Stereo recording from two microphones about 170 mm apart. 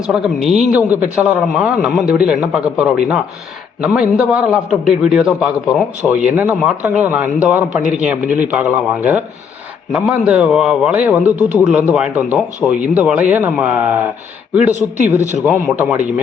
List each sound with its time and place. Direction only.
0.1 s a man's voice: centre (ahead or behind)
14.7 s speech: 45° right (ahead or behind)
15.4 s speech: 10° right (ahead or behind)